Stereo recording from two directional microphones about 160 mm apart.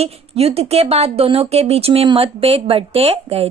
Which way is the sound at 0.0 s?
40° right (ahead or behind).